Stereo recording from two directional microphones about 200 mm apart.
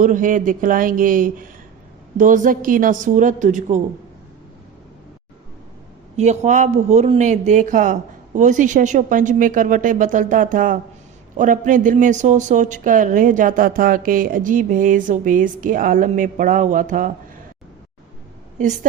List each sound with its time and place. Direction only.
0.0 s speech: 40° right (ahead or behind)
6.1 s speech: 35° right (ahead or behind)